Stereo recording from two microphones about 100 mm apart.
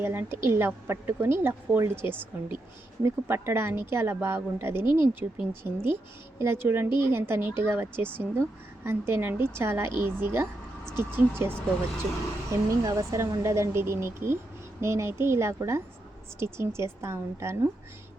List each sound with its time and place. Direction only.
0.0 s a woman's voice: 25° right (ahead or behind)
12.8 s a woman's voice: 35° right (ahead or behind)